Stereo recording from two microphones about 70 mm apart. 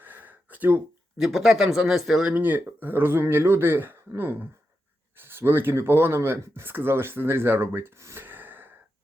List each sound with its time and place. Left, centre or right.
0.0 s gasp: right
1.2 s speech: centre
2.2 s speech: right